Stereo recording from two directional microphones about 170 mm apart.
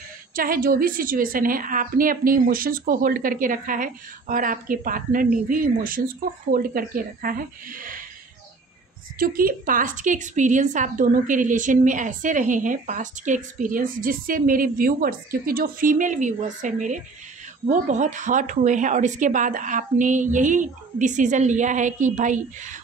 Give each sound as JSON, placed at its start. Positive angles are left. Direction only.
{"t": 0.4, "sound": "a woman's voice", "side_deg": -55}
{"t": 9.2, "sound": "a woman's voice", "side_deg": -60}